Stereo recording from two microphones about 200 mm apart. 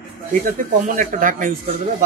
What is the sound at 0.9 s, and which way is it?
Speech, 40° right (ahead or behind).